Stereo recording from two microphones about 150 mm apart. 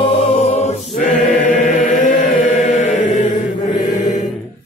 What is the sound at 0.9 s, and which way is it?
Chant, 60° left (ahead or behind).